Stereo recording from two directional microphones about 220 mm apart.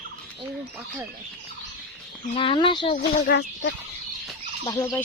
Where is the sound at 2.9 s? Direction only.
45° left (ahead or behind).